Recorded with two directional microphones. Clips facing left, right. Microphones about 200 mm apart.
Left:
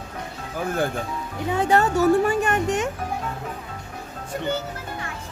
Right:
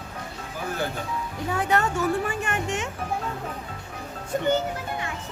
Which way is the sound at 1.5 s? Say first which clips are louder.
Left 5 dB; 30° left (ahead or behind).